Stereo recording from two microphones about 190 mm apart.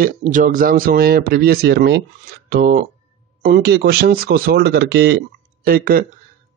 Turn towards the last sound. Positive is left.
turn(degrees=-50)  # may be behind; listen again after turning